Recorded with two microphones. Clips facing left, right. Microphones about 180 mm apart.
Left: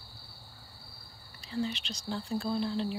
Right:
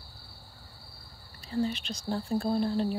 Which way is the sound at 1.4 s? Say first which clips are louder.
Right 4 dB; 45° right (ahead or behind).